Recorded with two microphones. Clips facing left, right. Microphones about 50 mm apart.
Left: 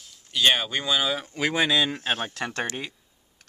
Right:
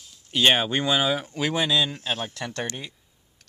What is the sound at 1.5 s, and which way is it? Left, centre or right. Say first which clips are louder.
Speech: left 1 dB; left.